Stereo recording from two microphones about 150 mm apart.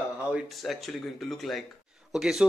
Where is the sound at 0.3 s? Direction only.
Centre (ahead or behind).